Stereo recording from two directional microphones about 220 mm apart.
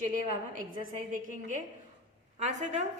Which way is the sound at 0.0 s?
35° right (ahead or behind).